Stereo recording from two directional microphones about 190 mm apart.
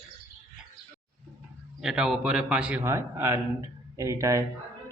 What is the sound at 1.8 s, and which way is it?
A man's voice, 5° right (ahead or behind).